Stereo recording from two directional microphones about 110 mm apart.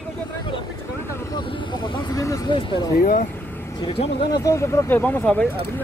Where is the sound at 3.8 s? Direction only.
60° left (ahead or behind).